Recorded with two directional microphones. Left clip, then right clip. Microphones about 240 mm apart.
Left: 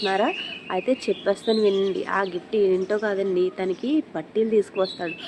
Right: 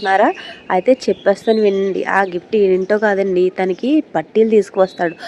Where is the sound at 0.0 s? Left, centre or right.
Right.